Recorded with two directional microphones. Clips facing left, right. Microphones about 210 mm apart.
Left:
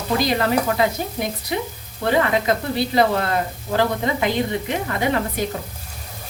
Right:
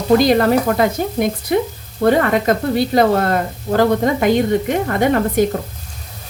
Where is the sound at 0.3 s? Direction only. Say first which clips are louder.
Right 6 dB; 45° right (ahead or behind).